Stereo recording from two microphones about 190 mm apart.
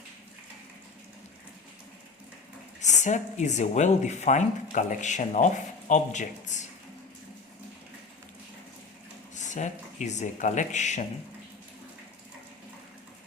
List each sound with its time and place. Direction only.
2.8 s speech: 40° left (ahead or behind)
9.3 s speech: 40° left (ahead or behind)